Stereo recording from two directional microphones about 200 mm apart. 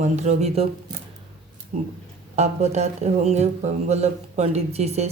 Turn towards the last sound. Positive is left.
turn(degrees=-30)  # may be behind; listen again after turning